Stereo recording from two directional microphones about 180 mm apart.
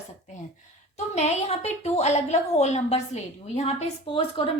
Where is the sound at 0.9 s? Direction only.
35° left (ahead or behind).